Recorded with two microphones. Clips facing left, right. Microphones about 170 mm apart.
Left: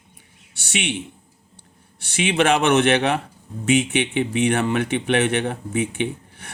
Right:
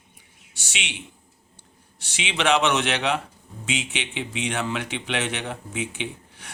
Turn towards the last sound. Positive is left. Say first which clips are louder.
# left 8 dB
turn(degrees=55)  # may be behind; listen again after turning